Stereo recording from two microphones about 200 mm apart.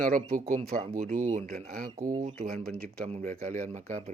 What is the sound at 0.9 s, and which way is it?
Speech, 40° right (ahead or behind).